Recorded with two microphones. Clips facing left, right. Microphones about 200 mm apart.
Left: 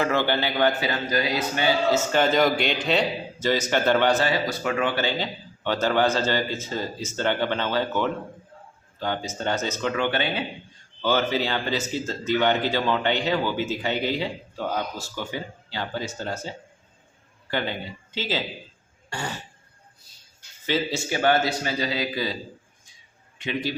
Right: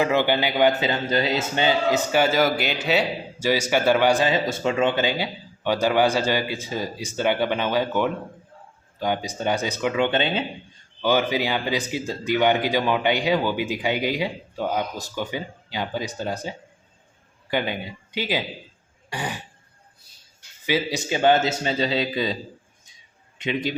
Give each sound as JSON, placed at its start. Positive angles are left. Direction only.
{"t": 0.0, "sound": "a man's voice", "side_deg": -15}
{"t": 20.7, "sound": "a man's voice", "side_deg": -15}
{"t": 23.4, "sound": "a man's voice", "side_deg": -20}